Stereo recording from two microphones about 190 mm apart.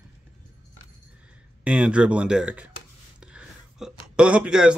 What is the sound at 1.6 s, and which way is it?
Speech, 5° right (ahead or behind).